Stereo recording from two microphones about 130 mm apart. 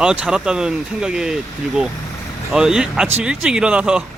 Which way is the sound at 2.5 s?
5° right (ahead or behind).